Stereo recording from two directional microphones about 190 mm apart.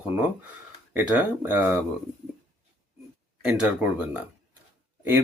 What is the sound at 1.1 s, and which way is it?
Speech, 10° right (ahead or behind).